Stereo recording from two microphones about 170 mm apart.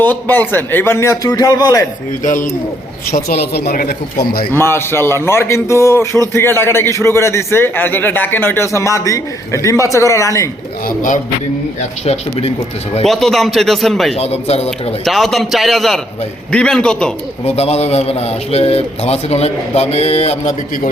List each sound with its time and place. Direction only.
0.0 s a man's voice: 10° left (ahead or behind)
2.2 s speech: 50° left (ahead or behind)
3.1 s speech: 60° left (ahead or behind)
4.5 s a man's voice: 15° left (ahead or behind)
10.8 s speech: 50° left (ahead or behind)
11.8 s a man's voice: 40° left (ahead or behind)
13.1 s speech: centre (ahead or behind)
14.2 s a man's voice: 40° left (ahead or behind)
15.0 s speech: centre (ahead or behind)
17.4 s a man's voice: 40° left (ahead or behind)